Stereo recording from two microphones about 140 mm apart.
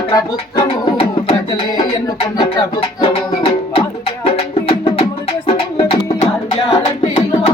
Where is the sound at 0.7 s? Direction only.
40° left (ahead or behind).